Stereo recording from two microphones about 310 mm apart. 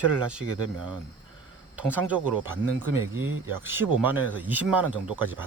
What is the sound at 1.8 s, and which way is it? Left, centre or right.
Speech, centre.